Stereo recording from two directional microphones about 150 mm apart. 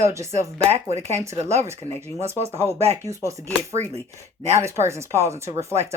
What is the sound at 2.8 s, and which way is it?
Speech, 45° right (ahead or behind).